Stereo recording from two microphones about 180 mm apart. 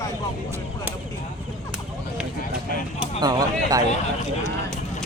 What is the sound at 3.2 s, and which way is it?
Speech, 20° right (ahead or behind).